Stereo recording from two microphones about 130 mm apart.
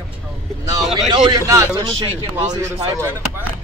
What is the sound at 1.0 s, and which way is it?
A man's voice, 30° right (ahead or behind).